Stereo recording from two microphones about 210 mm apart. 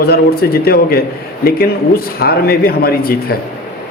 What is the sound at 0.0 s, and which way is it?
A man's voice, 45° left (ahead or behind).